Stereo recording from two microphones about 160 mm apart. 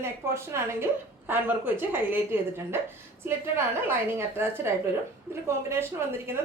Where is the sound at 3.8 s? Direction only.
15° right (ahead or behind).